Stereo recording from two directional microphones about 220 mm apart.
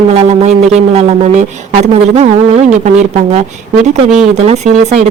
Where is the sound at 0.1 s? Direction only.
30° right (ahead or behind).